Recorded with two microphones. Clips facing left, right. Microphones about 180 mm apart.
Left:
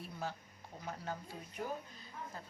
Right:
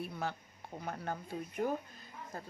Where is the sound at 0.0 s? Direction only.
65° right (ahead or behind).